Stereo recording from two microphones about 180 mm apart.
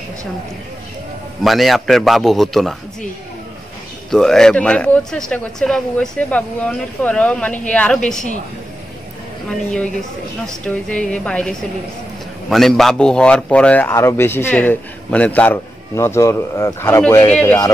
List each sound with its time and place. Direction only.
1.4 s a man's voice: centre (ahead or behind)
4.1 s a man's voice: 5° left (ahead or behind)
9.5 s a man's voice: 5° left (ahead or behind)